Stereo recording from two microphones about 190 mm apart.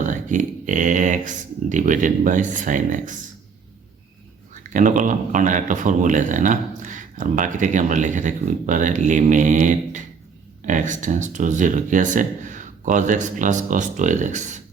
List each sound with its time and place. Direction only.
0.0 s speech: 40° right (ahead or behind)
4.5 s speech: 40° right (ahead or behind)